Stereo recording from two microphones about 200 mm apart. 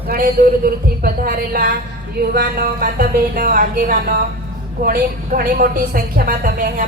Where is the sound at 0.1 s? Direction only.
45° right (ahead or behind).